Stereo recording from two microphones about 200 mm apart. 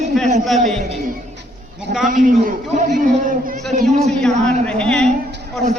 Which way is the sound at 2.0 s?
40° right (ahead or behind).